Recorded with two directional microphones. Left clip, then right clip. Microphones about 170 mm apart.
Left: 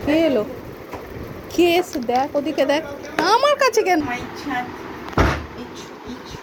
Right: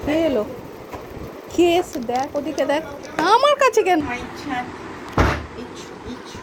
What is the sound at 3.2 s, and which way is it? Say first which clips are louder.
Speech: right 1 dB; 15° right (ahead or behind).